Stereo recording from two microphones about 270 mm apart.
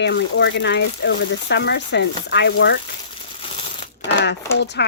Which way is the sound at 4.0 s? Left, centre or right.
Left.